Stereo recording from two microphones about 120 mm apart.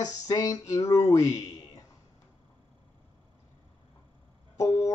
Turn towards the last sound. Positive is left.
turn(degrees=25)  # may be behind; listen again after turning